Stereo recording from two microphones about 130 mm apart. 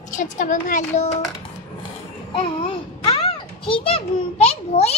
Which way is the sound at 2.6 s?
45° left (ahead or behind).